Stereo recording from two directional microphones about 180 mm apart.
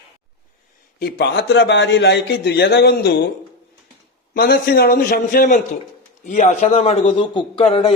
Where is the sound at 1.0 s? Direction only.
70° left (ahead or behind).